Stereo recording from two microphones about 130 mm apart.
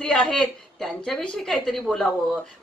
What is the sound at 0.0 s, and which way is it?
A woman's voice, 5° left (ahead or behind).